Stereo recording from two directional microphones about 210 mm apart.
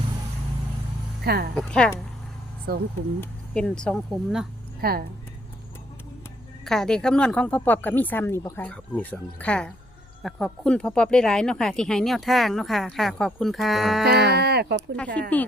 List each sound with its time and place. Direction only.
1.2 s speech: 50° right (ahead or behind)
1.5 s speech: 5° left (ahead or behind)
2.7 s speech: 45° right (ahead or behind)
3.2 s speech: 5° left (ahead or behind)
4.8 s speech: 45° right (ahead or behind)
6.7 s speech: 5° left (ahead or behind)
14.3 s speech: 50° right (ahead or behind)
14.9 s speech: 5° left (ahead or behind)